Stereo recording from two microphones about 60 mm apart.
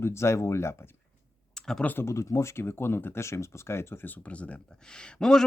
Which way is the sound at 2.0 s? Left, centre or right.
Left.